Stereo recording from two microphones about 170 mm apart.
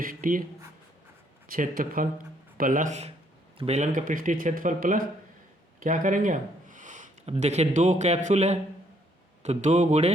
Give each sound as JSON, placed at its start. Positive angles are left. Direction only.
{"t": 0.0, "sound": "speech", "side_deg": -55}
{"t": 1.5, "sound": "speech", "side_deg": -55}